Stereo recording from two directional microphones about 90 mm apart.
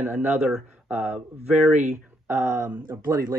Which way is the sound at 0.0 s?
20° right (ahead or behind).